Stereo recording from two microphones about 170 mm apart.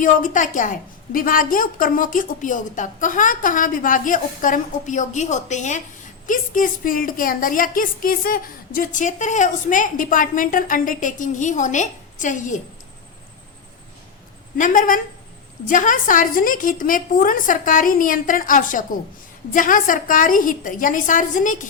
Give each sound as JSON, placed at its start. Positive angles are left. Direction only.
{"t": 0.0, "sound": "a woman's voice", "side_deg": 50}
{"t": 14.6, "sound": "a woman's voice", "side_deg": 55}